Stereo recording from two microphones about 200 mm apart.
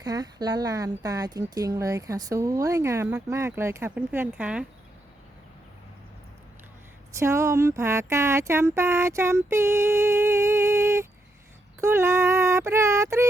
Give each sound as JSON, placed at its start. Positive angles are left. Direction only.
{"t": 0.0, "sound": "speech", "side_deg": -20}
{"t": 7.1, "sound": "speech", "side_deg": -15}